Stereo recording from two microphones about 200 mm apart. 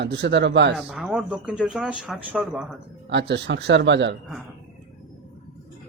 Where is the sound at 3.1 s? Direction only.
60° right (ahead or behind).